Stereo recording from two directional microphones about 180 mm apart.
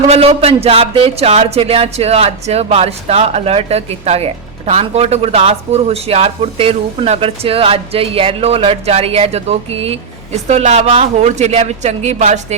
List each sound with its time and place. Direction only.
0.1 s speech: 35° right (ahead or behind)